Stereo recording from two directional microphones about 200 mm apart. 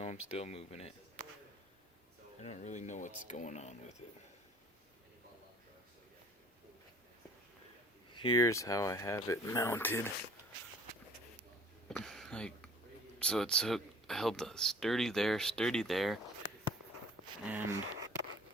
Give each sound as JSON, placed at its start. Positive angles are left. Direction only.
{"t": 0.3, "sound": "speech", "side_deg": 30}
{"t": 2.4, "sound": "speech", "side_deg": 35}
{"t": 8.1, "sound": "speech", "side_deg": 20}
{"t": 11.9, "sound": "a sound", "side_deg": 0}
{"t": 13.1, "sound": "speech", "side_deg": 5}
{"t": 17.4, "sound": "speech", "side_deg": -10}